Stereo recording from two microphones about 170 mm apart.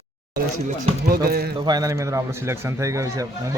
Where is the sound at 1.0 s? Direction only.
60° right (ahead or behind).